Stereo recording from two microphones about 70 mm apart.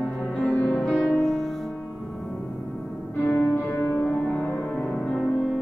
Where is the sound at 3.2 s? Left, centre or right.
Left.